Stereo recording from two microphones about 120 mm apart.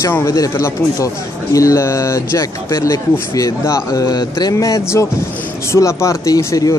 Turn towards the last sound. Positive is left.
turn(degrees=30)  # may be behind; listen again after turning